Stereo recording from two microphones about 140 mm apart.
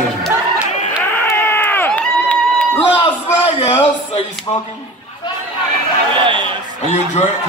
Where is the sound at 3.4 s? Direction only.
45° left (ahead or behind).